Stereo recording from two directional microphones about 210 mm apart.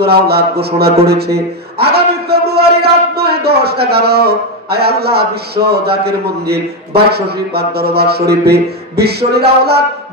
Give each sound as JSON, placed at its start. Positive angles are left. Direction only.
{"t": 0.0, "sound": "a man's voice", "side_deg": -50}